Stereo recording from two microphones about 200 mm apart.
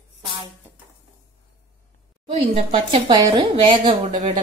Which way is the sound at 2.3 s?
30° right (ahead or behind).